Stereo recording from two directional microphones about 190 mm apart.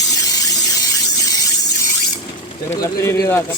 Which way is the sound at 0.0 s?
20° left (ahead or behind).